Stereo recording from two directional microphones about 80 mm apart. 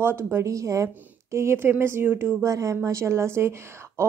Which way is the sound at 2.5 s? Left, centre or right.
Right.